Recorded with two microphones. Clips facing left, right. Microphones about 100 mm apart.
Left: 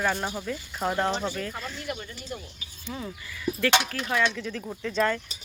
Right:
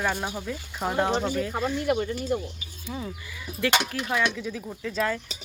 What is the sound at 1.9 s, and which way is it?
Speech, 40° right (ahead or behind).